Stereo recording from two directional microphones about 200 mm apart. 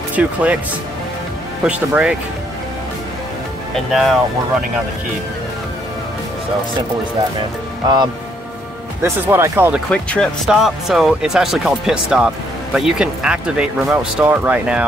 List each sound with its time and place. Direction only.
0.1 s speech: 5° right (ahead or behind)
1.6 s speech: 5° right (ahead or behind)
3.7 s speech: centre (ahead or behind)
7.8 s speech: 20° right (ahead or behind)
9.0 s speech: 10° right (ahead or behind)
9.8 s speech: 5° left (ahead or behind)